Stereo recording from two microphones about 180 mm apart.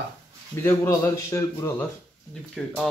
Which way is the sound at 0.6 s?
15° left (ahead or behind).